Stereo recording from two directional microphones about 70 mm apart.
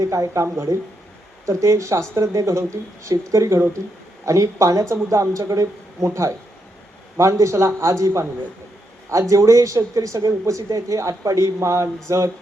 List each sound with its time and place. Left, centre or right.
0.0 s speech: right